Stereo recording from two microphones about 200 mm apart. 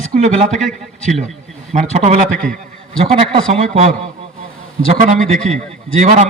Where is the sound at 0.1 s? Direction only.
40° right (ahead or behind).